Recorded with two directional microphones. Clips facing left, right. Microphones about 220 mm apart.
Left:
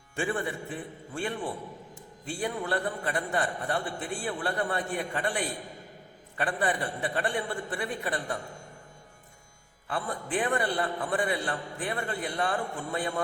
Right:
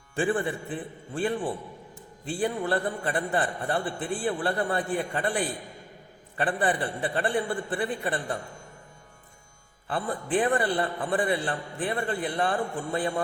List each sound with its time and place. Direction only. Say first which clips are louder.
0.2 s a man's voice: right 4 dB; 30° right (ahead or behind)
9.8 s a man's voice: right 3 dB; 35° right (ahead or behind)